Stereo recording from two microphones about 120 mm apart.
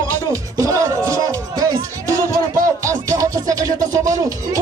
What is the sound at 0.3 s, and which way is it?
Music, 25° right (ahead or behind).